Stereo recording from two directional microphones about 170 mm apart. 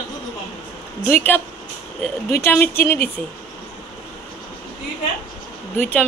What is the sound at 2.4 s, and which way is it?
Speech, 10° left (ahead or behind).